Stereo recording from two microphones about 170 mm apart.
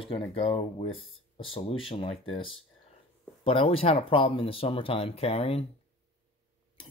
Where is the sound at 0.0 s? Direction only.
35° left (ahead or behind).